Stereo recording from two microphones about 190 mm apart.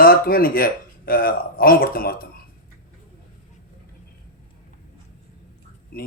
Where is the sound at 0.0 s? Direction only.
50° left (ahead or behind).